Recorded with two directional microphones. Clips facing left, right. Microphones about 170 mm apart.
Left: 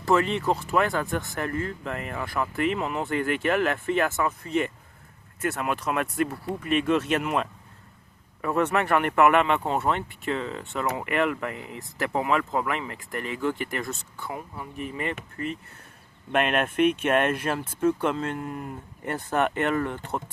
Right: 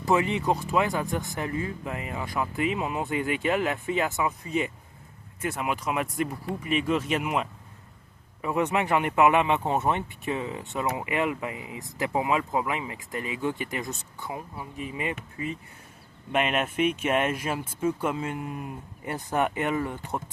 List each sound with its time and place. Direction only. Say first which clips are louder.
0.0 s speech: left 1 dB; 20° right (ahead or behind)